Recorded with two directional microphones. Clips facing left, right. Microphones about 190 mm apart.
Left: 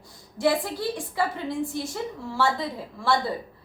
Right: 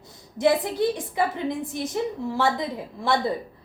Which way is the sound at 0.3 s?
20° right (ahead or behind).